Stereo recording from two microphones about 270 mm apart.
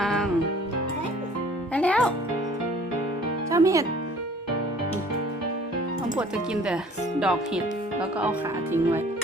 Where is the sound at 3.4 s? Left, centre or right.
Centre.